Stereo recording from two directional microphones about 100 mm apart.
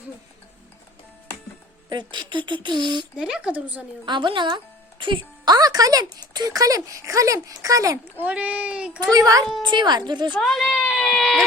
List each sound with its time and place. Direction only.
1.9 s speech: 50° right (ahead or behind)
3.2 s a child's voice: 5° right (ahead or behind)
4.0 s speech: 50° right (ahead or behind)
5.5 s speech: 40° right (ahead or behind)
8.2 s a child's voice: 15° right (ahead or behind)
9.0 s speech: 40° right (ahead or behind)
9.6 s speech: 50° right (ahead or behind)
10.4 s a sound: 5° left (ahead or behind)